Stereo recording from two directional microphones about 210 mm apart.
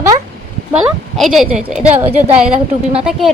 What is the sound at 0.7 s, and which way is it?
A woman's voice, centre (ahead or behind).